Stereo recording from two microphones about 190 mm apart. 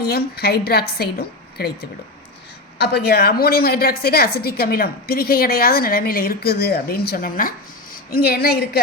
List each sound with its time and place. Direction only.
0.0 s a woman's voice: 55° left (ahead or behind)